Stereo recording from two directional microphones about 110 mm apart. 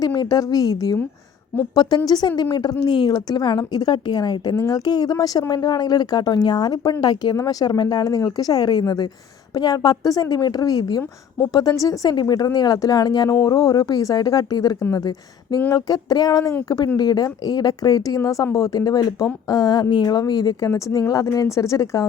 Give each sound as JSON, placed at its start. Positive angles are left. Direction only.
{"t": 0.0, "sound": "speech", "side_deg": 40}